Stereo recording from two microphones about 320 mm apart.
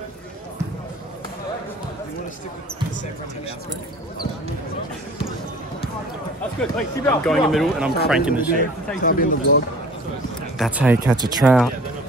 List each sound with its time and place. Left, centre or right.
6.6 s speech: centre
9.0 s speech: left
10.6 s speech: centre